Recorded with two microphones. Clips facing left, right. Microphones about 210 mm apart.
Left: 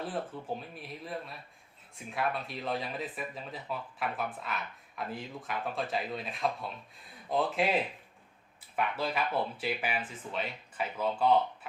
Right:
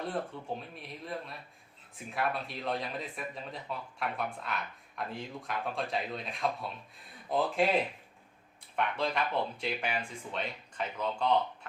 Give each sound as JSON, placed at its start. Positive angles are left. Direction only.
{"t": 0.0, "sound": "speech", "side_deg": 0}